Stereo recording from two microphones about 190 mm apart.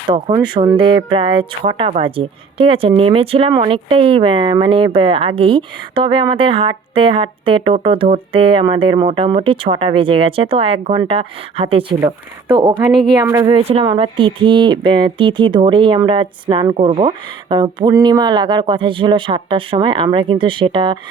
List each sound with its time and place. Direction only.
0.1 s speech: 25° right (ahead or behind)